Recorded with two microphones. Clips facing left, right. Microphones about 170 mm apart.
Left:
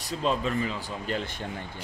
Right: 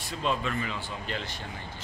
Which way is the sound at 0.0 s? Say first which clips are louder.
Left 3 dB; 35° left (ahead or behind).